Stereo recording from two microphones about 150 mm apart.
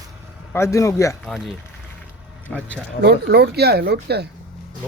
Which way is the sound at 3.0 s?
90° right.